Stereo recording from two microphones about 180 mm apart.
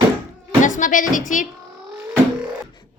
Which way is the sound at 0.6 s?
45° left (ahead or behind).